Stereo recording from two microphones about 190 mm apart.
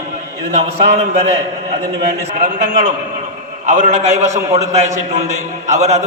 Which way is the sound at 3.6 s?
40° right (ahead or behind).